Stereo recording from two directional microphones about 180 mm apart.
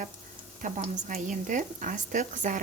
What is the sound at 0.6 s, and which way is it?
A woman's voice, 45° right (ahead or behind).